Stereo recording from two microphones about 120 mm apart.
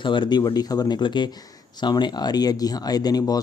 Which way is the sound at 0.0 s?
40° left (ahead or behind).